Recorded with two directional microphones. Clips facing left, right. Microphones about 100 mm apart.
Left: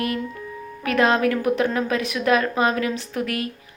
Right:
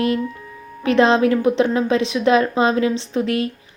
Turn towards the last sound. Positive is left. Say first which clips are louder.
# right 6 dB
turn(degrees=-25)  # may be behind; listen again after turning